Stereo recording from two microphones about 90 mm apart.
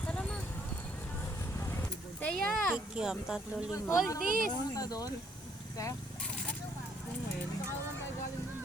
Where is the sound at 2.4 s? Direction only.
5° left (ahead or behind).